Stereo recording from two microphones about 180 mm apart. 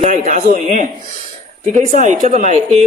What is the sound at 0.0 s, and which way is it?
Speech, 45° right (ahead or behind).